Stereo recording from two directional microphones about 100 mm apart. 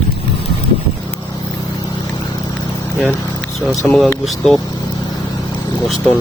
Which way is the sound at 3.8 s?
5° left (ahead or behind).